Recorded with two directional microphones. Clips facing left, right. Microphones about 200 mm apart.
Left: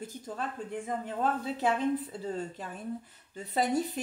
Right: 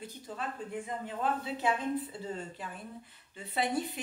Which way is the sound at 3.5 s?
40° left (ahead or behind).